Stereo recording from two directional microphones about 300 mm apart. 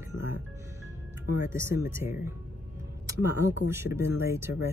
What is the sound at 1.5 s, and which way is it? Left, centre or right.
Speech, centre.